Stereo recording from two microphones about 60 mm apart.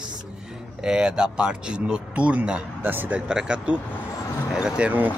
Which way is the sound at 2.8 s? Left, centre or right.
Right.